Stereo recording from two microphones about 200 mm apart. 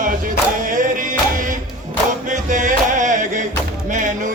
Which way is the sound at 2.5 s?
40° right (ahead or behind).